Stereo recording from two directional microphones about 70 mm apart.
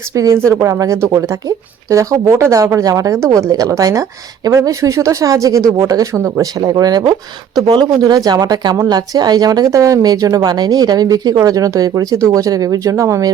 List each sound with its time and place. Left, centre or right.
0.3 s a woman's voice: right
6.6 s speech: right
7.9 s a woman's voice: right
8.9 s speech: right
9.6 s a woman's voice: right